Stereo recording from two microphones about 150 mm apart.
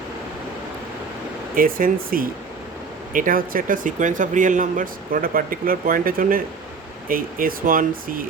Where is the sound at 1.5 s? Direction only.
70° right (ahead or behind).